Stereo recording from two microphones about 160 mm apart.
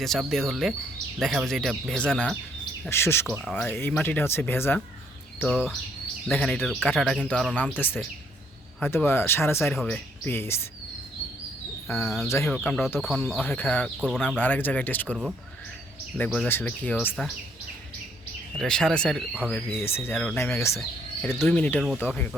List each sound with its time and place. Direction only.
0.0 s speech: centre (ahead or behind)
3.2 s speech: centre (ahead or behind)
3.5 s speech: 10° left (ahead or behind)
9.6 s speech: centre (ahead or behind)
10.2 s speech: 15° left (ahead or behind)
12.0 s speech: centre (ahead or behind)
13.4 s speech: 10° left (ahead or behind)
18.5 s speech: 5° left (ahead or behind)